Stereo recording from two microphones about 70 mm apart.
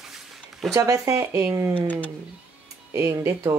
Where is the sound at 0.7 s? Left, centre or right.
Right.